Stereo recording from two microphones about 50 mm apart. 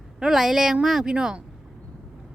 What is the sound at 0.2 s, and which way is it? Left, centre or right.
A woman's voice, centre.